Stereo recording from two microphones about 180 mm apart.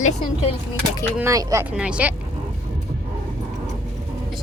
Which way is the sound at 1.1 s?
15° right (ahead or behind).